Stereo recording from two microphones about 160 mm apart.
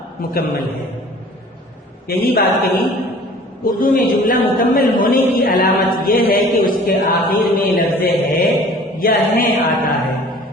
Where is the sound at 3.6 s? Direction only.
60° left (ahead or behind); by 5.7 s 80° left.